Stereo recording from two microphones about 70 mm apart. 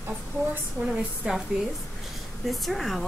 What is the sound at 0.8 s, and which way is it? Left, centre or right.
Speech, centre.